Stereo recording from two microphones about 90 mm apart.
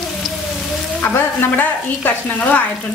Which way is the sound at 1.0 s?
20° left (ahead or behind).